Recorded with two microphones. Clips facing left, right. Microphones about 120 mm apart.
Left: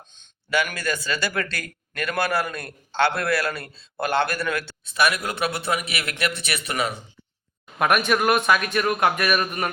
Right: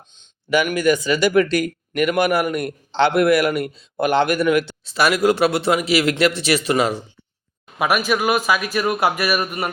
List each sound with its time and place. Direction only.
0.1 s speech: 15° right (ahead or behind)
4.9 s a man's voice: 30° right (ahead or behind)
7.8 s speech: 5° right (ahead or behind)